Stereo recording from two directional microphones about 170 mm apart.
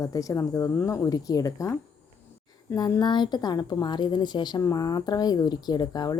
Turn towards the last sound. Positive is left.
turn(degrees=25)  # may be behind; listen again after turning